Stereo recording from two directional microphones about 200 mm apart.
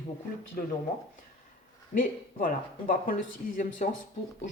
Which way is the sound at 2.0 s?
45° left (ahead or behind).